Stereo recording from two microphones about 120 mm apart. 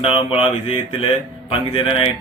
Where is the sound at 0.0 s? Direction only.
50° left (ahead or behind).